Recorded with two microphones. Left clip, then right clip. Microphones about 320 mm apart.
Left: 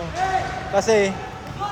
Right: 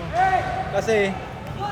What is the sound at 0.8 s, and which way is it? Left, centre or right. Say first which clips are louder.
Speech: left 4 dB; left.